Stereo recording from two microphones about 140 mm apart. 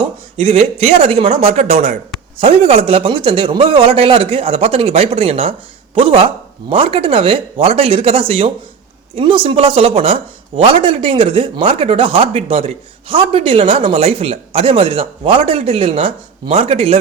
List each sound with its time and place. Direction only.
0.4 s speech: 45° right (ahead or behind)